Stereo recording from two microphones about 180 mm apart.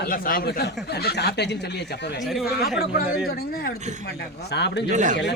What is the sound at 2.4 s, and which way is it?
Speech, 60° left (ahead or behind).